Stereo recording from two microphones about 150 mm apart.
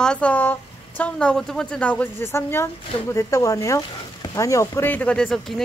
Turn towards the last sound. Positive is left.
turn(degrees=5)  # may be behind; listen again after turning